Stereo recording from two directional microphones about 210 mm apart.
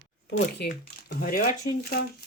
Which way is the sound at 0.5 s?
50° left (ahead or behind).